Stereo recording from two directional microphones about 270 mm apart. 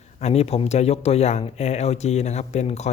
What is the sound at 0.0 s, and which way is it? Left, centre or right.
Speech, left.